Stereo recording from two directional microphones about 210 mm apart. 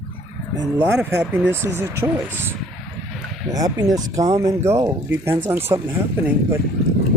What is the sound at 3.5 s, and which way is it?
Speech, 15° right (ahead or behind).